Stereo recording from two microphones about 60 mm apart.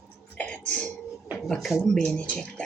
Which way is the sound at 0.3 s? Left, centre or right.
Centre.